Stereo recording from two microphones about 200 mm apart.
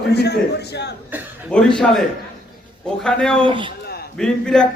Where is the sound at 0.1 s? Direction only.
55° left (ahead or behind).